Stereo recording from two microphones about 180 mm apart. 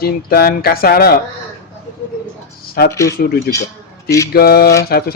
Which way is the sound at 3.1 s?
55° left (ahead or behind).